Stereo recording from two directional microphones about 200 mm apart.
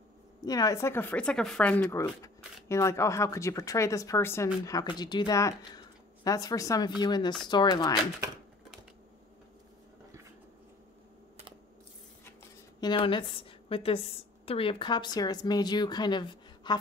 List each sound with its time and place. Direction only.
0.5 s a woman's voice: 20° left (ahead or behind)
12.8 s a woman's voice: 25° left (ahead or behind)